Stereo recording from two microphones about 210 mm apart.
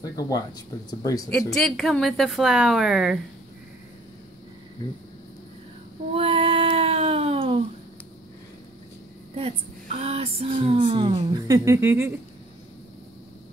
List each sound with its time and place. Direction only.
0.3 s speech: 20° left (ahead or behind)
1.5 s speech: 5° left (ahead or behind)
6.1 s a sound: 25° right (ahead or behind)
9.3 s speech: 30° right (ahead or behind); by 12.1 s 10° right (ahead or behind)